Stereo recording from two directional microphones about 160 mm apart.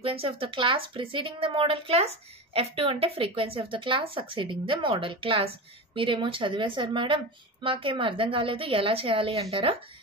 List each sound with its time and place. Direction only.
0.0 s speech: 35° right (ahead or behind)